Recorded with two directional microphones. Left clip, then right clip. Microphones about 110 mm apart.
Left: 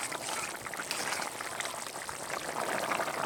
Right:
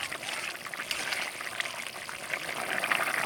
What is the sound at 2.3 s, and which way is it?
Pour, 10° left (ahead or behind).